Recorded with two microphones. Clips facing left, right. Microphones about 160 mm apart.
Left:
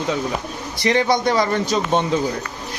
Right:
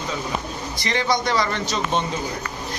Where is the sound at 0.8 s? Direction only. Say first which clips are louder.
Left 6 dB; 55° left (ahead or behind).